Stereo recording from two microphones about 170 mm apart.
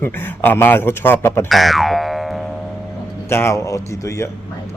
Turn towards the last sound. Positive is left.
turn(degrees=15)  # may be behind; listen again after turning